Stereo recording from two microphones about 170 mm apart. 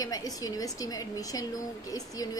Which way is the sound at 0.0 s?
20° left (ahead or behind).